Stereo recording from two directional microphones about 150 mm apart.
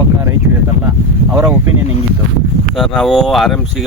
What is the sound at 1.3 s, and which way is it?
Speech, 15° right (ahead or behind).